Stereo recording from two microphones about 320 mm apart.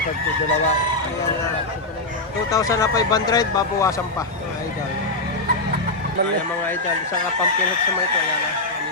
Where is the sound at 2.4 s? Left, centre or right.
Centre.